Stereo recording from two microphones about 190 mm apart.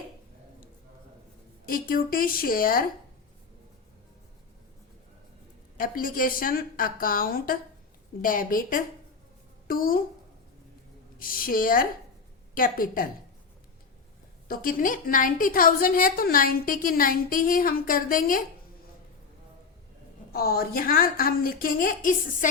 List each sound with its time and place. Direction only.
1.6 s a woman's voice: 50° left (ahead or behind)
5.7 s a woman's voice: 45° left (ahead or behind)
11.2 s a woman's voice: 50° left (ahead or behind)
14.4 s a woman's voice: 50° left (ahead or behind)
20.3 s a woman's voice: 55° left (ahead or behind)